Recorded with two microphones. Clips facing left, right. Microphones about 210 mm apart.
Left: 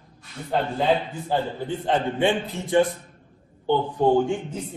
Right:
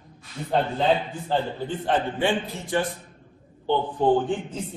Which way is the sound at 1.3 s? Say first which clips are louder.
Left 1 dB; 15° left (ahead or behind).